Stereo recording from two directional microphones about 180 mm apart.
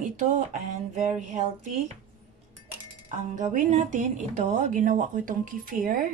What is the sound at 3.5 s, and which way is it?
Speech, 45° right (ahead or behind).